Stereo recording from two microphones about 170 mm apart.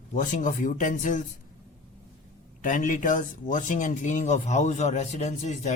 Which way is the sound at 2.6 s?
50° left (ahead or behind).